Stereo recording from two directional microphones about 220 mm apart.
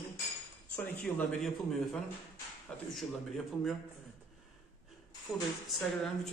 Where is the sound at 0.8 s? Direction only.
5° left (ahead or behind).